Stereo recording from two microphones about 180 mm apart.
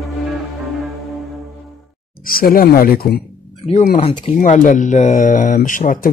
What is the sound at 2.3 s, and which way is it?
Speech, 55° left (ahead or behind).